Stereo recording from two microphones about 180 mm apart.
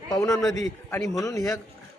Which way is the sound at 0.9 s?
15° left (ahead or behind).